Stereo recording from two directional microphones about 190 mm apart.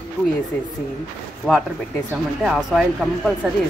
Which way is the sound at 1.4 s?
Centre (ahead or behind).